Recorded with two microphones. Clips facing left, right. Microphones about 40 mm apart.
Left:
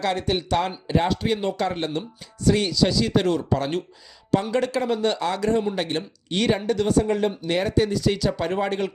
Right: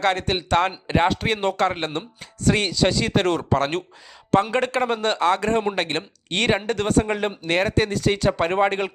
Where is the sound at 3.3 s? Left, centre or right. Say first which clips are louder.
Right 2 dB; right.